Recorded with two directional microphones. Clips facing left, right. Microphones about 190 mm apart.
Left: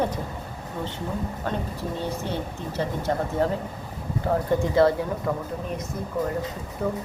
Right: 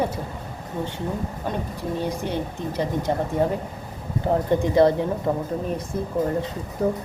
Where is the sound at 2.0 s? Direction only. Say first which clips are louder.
Right 4 dB; 15° right (ahead or behind).